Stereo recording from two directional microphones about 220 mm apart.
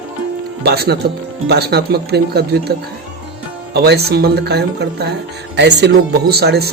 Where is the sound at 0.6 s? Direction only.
45° right (ahead or behind).